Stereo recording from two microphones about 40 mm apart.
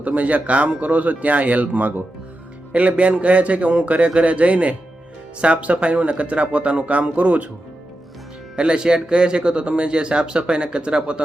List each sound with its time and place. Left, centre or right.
0.0 s speech: right
8.5 s speech: right